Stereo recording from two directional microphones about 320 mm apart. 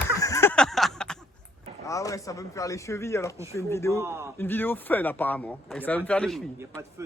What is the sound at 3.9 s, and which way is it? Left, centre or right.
Speech, centre.